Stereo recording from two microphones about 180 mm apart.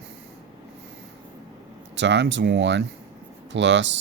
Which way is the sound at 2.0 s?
75° right (ahead or behind).